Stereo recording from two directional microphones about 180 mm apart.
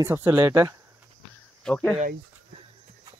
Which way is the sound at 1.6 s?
5° left (ahead or behind).